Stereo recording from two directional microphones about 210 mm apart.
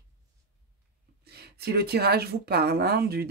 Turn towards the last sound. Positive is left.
turn(degrees=-50)  # may be behind; listen again after turning